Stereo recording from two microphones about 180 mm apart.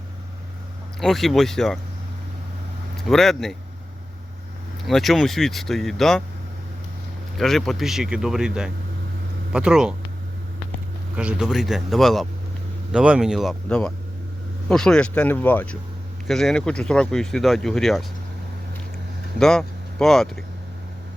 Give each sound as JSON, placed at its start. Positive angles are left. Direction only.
{"t": 0.9, "sound": "speech", "side_deg": 0}
{"t": 3.1, "sound": "speech", "side_deg": 0}
{"t": 4.9, "sound": "speech", "side_deg": 0}
{"t": 7.3, "sound": "speech", "side_deg": 0}
{"t": 11.2, "sound": "speech", "side_deg": -5}
{"t": 19.4, "sound": "speech", "side_deg": 0}